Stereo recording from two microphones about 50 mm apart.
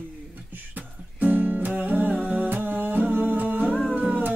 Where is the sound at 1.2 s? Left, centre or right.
Right.